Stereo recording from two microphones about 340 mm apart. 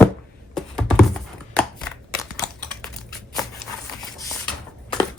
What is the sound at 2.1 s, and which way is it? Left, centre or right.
Typing, centre.